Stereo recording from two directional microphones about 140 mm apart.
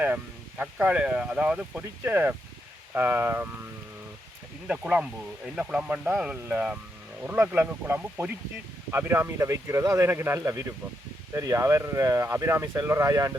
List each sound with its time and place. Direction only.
0.0 s speech: 10° right (ahead or behind)
4.7 s speech: 10° right (ahead or behind); by 13.3 s 25° right (ahead or behind)